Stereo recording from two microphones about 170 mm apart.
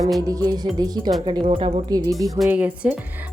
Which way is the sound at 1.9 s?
20° right (ahead or behind).